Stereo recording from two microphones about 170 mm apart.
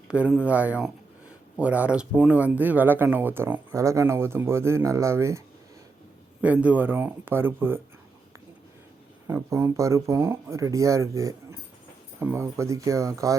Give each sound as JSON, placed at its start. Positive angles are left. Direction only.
{"t": 0.1, "sound": "speech", "side_deg": -5}
{"t": 6.4, "sound": "speech", "side_deg": -10}
{"t": 9.2, "sound": "speech", "side_deg": -15}